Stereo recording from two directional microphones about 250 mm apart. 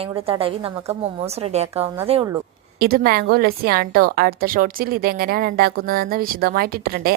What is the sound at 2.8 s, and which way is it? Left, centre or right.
A woman's voice, right.